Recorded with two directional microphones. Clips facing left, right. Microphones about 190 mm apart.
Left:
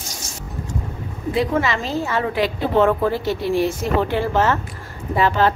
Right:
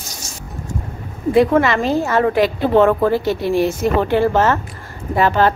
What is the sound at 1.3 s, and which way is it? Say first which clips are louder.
A woman's voice: right 7 dB; 55° right (ahead or behind).